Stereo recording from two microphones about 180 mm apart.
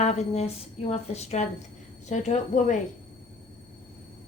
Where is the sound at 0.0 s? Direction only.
40° left (ahead or behind).